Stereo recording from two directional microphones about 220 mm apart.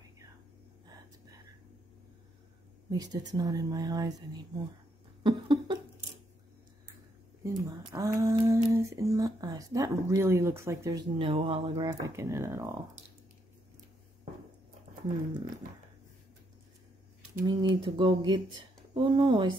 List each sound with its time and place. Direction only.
2.9 s speech: 15° right (ahead or behind)
5.2 s a sound: 20° right (ahead or behind)
7.4 s speech: 15° right (ahead or behind)
17.4 s speech: 20° right (ahead or behind)